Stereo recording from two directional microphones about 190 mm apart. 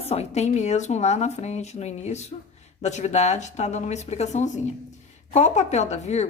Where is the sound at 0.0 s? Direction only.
35° left (ahead or behind).